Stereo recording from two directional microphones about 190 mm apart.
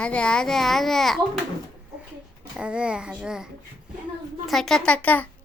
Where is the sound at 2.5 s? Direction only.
5° right (ahead or behind).